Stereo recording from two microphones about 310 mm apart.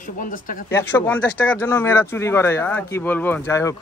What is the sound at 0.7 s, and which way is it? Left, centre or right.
Speech, centre.